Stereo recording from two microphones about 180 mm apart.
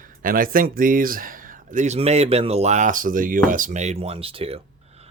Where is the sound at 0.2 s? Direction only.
50° right (ahead or behind).